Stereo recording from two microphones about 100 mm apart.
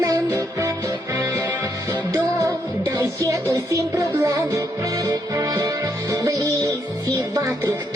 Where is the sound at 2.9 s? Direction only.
30° right (ahead or behind).